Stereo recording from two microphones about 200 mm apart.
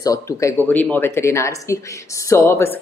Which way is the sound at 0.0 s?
15° left (ahead or behind).